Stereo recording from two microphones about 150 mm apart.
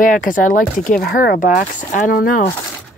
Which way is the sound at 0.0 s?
65° left (ahead or behind).